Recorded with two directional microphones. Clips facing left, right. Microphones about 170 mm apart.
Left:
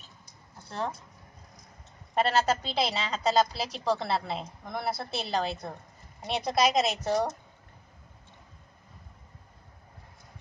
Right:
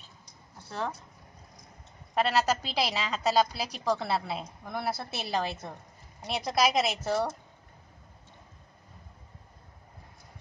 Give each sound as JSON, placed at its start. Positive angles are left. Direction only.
{"t": 2.1, "sound": "a woman's voice", "side_deg": 0}
{"t": 7.0, "sound": "a woman's voice", "side_deg": 20}